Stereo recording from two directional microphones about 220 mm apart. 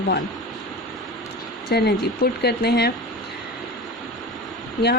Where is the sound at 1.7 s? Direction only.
50° left (ahead or behind).